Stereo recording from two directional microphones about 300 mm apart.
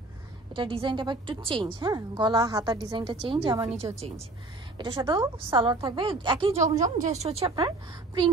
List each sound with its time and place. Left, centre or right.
0.6 s a woman's voice: centre